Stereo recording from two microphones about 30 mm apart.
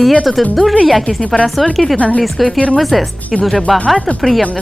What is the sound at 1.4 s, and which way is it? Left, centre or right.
Speech, left.